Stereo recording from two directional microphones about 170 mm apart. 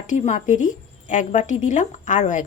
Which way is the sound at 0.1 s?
45° left (ahead or behind).